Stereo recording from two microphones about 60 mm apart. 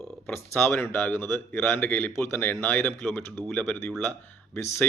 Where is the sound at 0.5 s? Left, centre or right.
Left.